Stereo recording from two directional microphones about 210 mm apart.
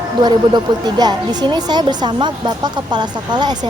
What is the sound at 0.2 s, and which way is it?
Speech, 20° right (ahead or behind).